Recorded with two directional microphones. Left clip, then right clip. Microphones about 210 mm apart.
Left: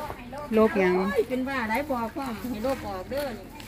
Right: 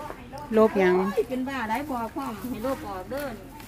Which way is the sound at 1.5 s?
50° right (ahead or behind).